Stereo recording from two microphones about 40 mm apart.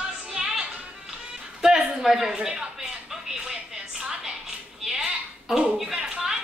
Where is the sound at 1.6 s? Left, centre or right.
Centre.